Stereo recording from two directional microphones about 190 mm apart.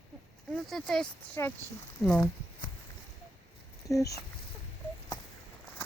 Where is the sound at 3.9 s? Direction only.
15° left (ahead or behind).